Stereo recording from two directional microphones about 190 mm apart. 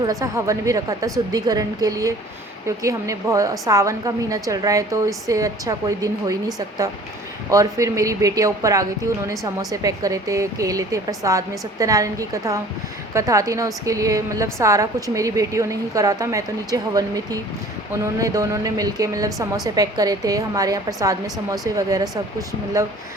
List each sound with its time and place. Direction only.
0.0 s a woman's voice: 15° right (ahead or behind)
7.5 s a woman's voice: 15° right (ahead or behind)